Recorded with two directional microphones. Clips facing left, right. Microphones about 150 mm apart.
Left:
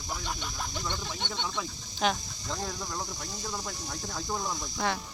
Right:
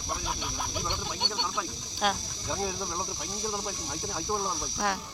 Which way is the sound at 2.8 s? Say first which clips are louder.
Right 2 dB; 15° right (ahead or behind).